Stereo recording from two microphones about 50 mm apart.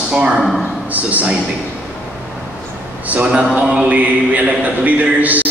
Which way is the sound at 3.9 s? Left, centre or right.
Right.